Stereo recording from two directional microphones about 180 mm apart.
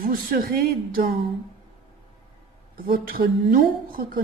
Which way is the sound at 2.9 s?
55° right (ahead or behind).